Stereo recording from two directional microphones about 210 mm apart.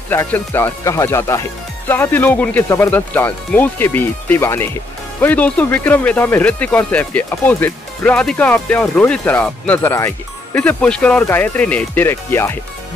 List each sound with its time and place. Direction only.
0.1 s speech: 10° left (ahead or behind)